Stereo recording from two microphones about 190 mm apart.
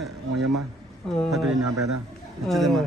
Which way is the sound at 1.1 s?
Centre (ahead or behind).